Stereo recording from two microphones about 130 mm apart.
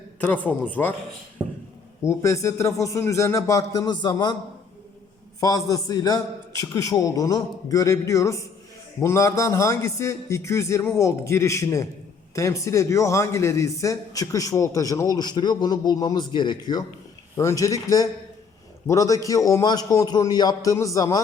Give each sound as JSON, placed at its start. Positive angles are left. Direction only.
{"t": 0.2, "sound": "a man's voice", "side_deg": 15}
{"t": 2.0, "sound": "a man's voice", "side_deg": 20}
{"t": 5.4, "sound": "a man's voice", "side_deg": 30}
{"t": 17.3, "sound": "a man's voice", "side_deg": 25}